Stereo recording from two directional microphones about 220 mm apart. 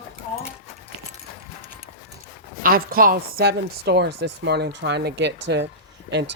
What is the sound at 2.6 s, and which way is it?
Speech, 40° right (ahead or behind).